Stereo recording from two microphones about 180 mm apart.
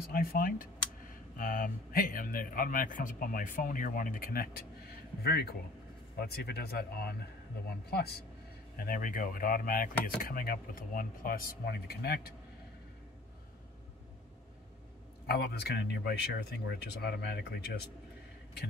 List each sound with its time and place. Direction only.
0.1 s a man's voice: 55° left (ahead or behind)
15.2 s speech: 60° left (ahead or behind)